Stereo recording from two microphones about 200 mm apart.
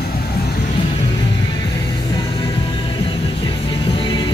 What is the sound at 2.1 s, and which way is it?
Music, 20° left (ahead or behind).